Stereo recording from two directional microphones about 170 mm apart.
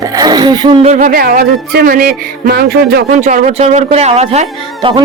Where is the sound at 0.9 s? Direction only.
60° right (ahead or behind).